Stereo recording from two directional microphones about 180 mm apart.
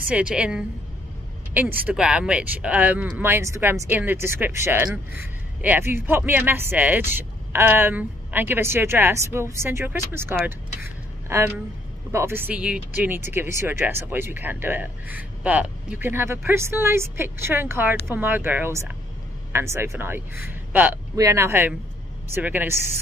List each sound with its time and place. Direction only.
0.1 s a woman's voice: 5° right (ahead or behind)